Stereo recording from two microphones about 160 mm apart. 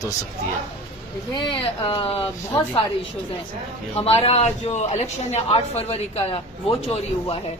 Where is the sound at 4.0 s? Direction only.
40° left (ahead or behind).